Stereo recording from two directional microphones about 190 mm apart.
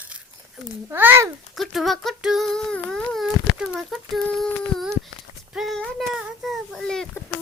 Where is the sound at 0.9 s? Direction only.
10° right (ahead or behind).